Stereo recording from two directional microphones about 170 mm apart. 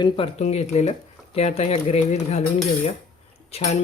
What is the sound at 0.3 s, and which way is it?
Speech, 40° left (ahead or behind).